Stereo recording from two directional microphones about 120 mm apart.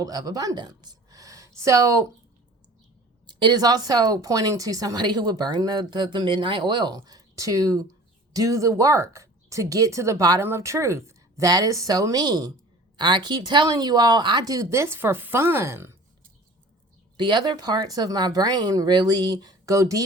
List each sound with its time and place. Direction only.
0.0 s speech: 30° right (ahead or behind)
3.2 s speech: 40° right (ahead or behind); by 16.0 s 25° right (ahead or behind)
17.2 s speech: 40° right (ahead or behind)